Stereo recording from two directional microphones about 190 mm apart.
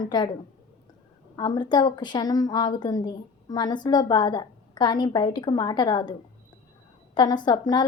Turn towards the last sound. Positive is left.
turn(degrees=20)  # may be behind; listen again after turning